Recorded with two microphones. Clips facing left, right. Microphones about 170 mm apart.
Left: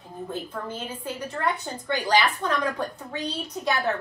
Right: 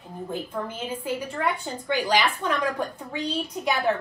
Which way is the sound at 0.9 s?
15° right (ahead or behind).